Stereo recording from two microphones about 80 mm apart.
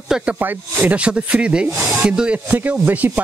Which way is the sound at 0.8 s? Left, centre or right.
Centre.